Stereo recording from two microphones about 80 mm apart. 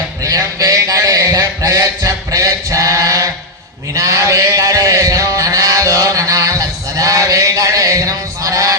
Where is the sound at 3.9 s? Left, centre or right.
Right.